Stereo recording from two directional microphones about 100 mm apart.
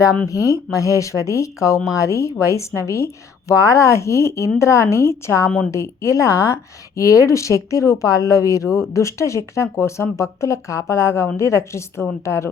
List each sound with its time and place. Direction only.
0.3 s a woman's voice: 35° left (ahead or behind)